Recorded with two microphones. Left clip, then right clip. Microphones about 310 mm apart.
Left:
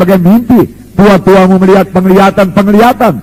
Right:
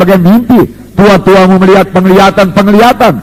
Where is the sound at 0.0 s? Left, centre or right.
Right.